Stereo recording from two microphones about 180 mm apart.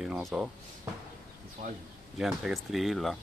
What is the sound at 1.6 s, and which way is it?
Speech, 40° right (ahead or behind).